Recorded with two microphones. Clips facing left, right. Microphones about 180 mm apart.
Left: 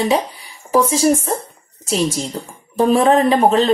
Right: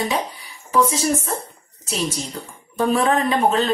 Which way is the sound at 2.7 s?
30° left (ahead or behind).